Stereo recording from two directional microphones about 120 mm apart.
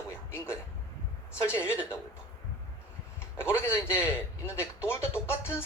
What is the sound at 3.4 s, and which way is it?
A man's voice, 20° left (ahead or behind).